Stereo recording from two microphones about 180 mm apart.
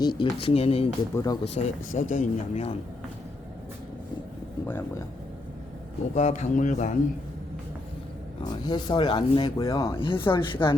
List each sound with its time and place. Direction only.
0.0 s speech: 25° left (ahead or behind)
1.1 s speech: 20° left (ahead or behind)
1.5 s speech: 45° left (ahead or behind)
4.6 s speech: 15° left (ahead or behind)
6.1 s speech: 40° left (ahead or behind)
8.6 s speech: 25° left (ahead or behind)
10.0 s speech: 30° left (ahead or behind)